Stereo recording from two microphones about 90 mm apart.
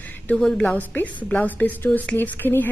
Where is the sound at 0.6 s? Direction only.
20° left (ahead or behind).